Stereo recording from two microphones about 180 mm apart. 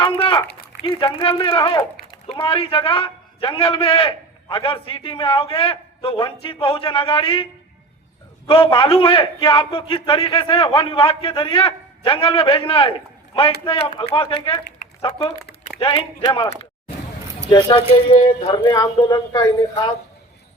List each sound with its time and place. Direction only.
0.0 s a sound: 30° left (ahead or behind)
0.8 s speech: 25° left (ahead or behind)
8.4 s a man's voice: 30° left (ahead or behind)
15.8 s speech: 30° left (ahead or behind)
17.5 s speech: 25° left (ahead or behind)